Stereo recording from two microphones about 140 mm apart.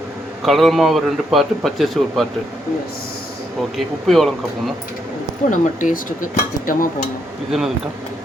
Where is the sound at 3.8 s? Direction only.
Centre (ahead or behind).